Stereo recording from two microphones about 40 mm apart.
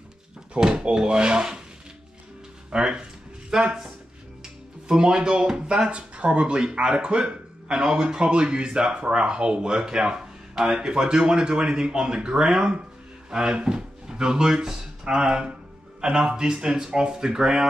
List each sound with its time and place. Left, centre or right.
0.6 s speech: right
2.7 s speech: centre
7.8 s speech: centre